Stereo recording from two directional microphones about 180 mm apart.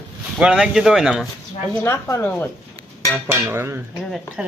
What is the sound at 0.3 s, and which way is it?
Speech, 5° right (ahead or behind).